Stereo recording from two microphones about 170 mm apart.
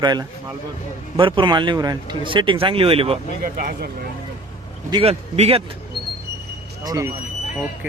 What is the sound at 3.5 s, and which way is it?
Speech, 60° right (ahead or behind).